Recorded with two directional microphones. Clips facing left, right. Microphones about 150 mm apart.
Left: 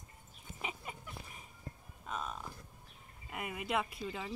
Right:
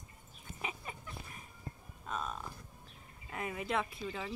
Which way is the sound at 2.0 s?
5° left (ahead or behind).